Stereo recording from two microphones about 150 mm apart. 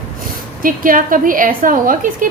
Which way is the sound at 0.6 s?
65° right (ahead or behind).